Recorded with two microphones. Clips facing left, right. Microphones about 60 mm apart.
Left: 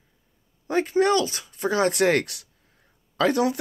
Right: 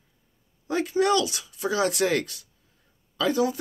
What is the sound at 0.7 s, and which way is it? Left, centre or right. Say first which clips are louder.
Speech: left 2 dB; left.